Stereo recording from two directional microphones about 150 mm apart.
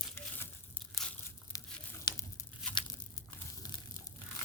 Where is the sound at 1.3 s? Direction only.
20° left (ahead or behind).